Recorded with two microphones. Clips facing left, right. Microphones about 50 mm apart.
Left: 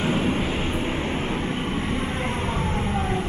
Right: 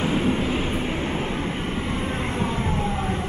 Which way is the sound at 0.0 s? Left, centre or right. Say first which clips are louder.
Right 1 dB; centre.